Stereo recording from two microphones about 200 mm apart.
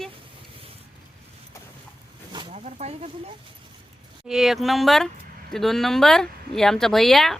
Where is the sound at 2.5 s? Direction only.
35° right (ahead or behind).